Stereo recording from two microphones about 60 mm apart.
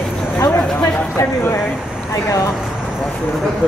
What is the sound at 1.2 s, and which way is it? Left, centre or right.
Speech, left.